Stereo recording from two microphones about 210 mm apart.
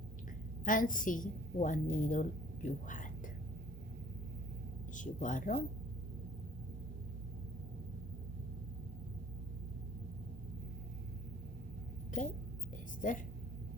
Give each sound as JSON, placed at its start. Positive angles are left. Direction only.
{"t": 0.6, "sound": "a woman's voice", "side_deg": 40}
{"t": 4.9, "sound": "a woman's voice", "side_deg": 40}
{"t": 12.1, "sound": "a woman's voice", "side_deg": 40}